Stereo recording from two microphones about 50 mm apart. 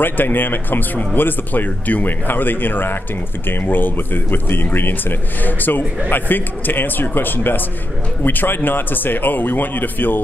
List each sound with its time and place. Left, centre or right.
0.0 s speech: left